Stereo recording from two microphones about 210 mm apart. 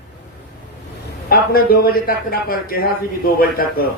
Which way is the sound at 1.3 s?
45° left (ahead or behind).